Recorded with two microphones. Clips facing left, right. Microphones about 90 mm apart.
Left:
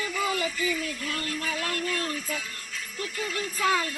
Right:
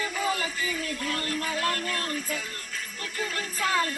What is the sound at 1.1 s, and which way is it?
Speech, 40° right (ahead or behind).